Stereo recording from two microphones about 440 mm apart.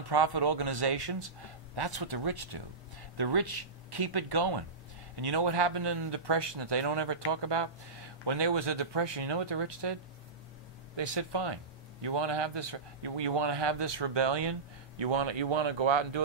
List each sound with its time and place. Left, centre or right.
0.1 s a man's voice: right
11.0 s a man's voice: right